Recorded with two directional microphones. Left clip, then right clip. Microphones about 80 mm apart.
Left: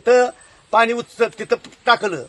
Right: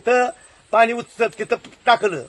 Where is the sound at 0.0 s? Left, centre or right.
Left.